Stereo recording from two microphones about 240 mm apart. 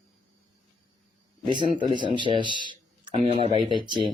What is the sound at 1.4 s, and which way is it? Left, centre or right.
A man's voice, centre.